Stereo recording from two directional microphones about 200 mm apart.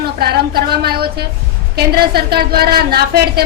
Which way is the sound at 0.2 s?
50° right (ahead or behind).